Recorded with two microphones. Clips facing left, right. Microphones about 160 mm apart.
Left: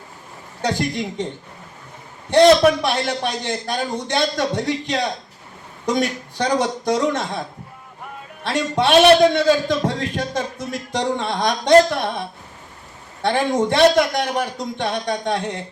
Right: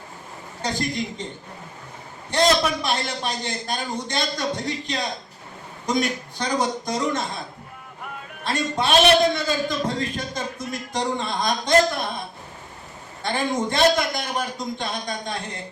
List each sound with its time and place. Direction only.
0.6 s a man's voice: 70° left (ahead or behind)
2.3 s a man's voice: 70° left (ahead or behind)
8.4 s a man's voice: 75° left (ahead or behind)
13.2 s a man's voice: 70° left (ahead or behind)